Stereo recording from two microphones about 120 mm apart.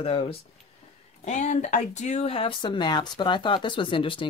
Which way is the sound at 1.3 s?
80° left.